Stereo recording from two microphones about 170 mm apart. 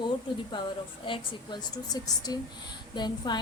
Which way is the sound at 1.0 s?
30° left (ahead or behind).